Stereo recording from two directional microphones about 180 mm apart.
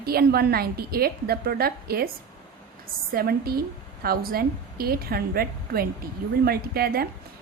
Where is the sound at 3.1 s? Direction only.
55° right (ahead or behind).